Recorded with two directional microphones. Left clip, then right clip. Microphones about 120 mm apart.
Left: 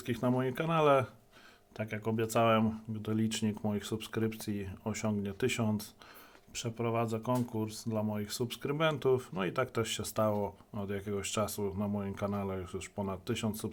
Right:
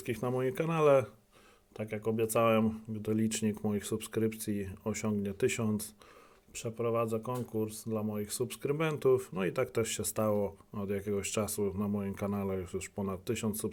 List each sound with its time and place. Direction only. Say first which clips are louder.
0.0 s speech: even; 50° right (ahead or behind)
6.5 s speech: right 2 dB; 30° right (ahead or behind); by 13.7 s 45° right (ahead or behind)